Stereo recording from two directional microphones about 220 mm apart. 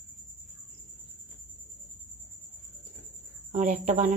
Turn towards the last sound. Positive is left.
turn(degrees=-30)  # may be behind; listen again after turning